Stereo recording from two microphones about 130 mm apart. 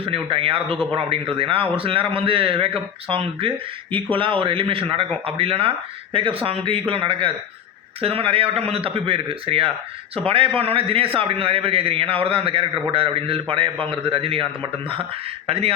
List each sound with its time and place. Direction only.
0.0 s a man's voice: 45° right (ahead or behind)
15.4 s a man's voice: 50° right (ahead or behind)